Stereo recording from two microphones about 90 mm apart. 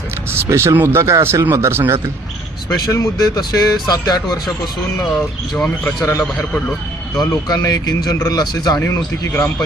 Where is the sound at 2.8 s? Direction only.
40° left (ahead or behind).